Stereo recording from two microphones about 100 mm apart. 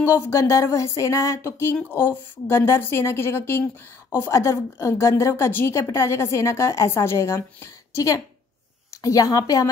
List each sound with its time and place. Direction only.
0.0 s a woman's voice: 30° left (ahead or behind)